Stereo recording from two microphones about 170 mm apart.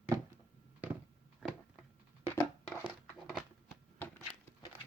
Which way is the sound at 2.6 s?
Centre (ahead or behind).